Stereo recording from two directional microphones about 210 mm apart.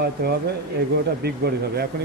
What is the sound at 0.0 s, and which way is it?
Speech, 50° right (ahead or behind).